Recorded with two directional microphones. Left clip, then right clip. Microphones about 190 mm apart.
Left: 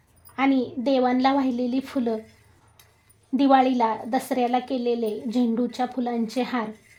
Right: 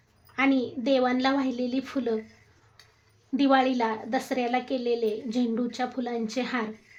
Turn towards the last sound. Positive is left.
turn(degrees=25)  # may be behind; listen again after turning